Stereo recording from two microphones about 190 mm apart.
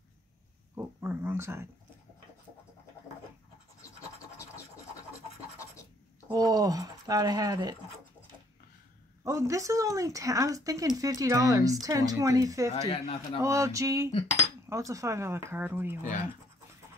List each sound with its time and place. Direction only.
0.7 s speech: 10° right (ahead or behind)
4.0 s scratch: 15° left (ahead or behind)
6.3 s speech: 20° right (ahead or behind)
9.2 s speech: 15° right (ahead or behind)
12.7 s speech: 30° left (ahead or behind)
13.4 s speech: 15° right (ahead or behind)
16.0 s speech: 40° left (ahead or behind)